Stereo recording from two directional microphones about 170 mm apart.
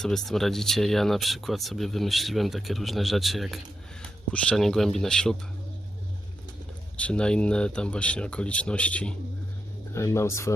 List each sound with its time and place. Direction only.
0.0 s speech: centre (ahead or behind)
7.0 s speech: 5° left (ahead or behind)